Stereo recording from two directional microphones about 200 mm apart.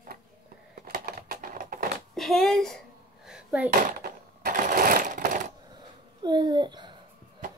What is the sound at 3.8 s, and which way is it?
Sewing machine, 45° right (ahead or behind).